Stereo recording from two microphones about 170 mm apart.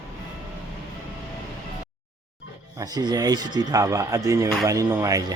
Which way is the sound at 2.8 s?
25° right (ahead or behind).